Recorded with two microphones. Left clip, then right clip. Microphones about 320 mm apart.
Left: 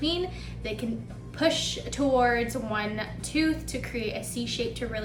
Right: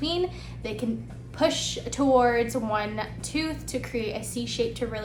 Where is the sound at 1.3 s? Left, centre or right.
Centre.